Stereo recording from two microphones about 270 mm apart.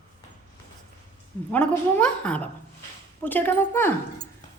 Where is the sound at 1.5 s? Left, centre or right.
Centre.